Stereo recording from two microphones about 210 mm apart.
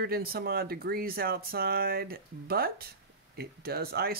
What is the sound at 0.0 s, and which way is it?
Speech, 45° right (ahead or behind).